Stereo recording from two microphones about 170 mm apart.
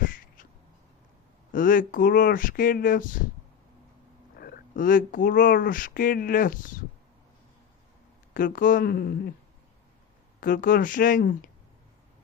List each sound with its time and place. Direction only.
0.0 s a sound: 50° left (ahead or behind)
1.5 s speech: 55° left (ahead or behind)
4.4 s speech: 65° left (ahead or behind)
8.3 s speech: 55° left (ahead or behind)
10.4 s speech: 55° left (ahead or behind)